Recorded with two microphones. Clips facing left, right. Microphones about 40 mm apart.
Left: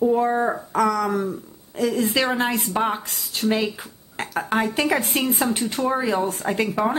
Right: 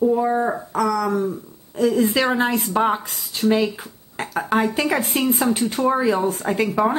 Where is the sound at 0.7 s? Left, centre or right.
Left.